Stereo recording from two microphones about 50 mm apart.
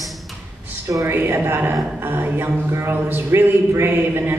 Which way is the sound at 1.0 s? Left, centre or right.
Right.